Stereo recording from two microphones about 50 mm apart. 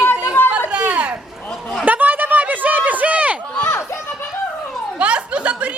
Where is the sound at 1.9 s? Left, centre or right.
Right.